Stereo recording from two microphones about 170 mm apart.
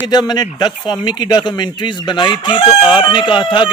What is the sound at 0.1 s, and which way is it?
Speech, 25° left (ahead or behind).